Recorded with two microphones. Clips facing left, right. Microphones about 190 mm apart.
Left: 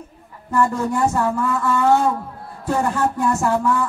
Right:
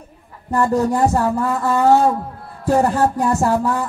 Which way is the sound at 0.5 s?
35° right (ahead or behind).